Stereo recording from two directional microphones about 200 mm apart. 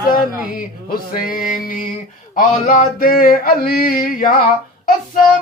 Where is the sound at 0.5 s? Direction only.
45° left (ahead or behind).